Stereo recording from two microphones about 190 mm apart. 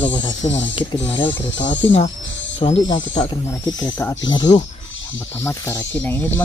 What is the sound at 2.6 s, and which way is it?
Speech, 30° left (ahead or behind).